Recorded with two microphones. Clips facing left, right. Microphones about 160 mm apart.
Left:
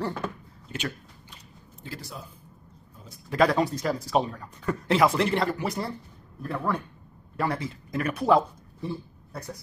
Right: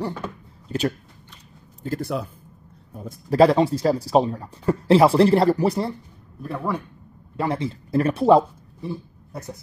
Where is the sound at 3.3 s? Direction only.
30° right (ahead or behind).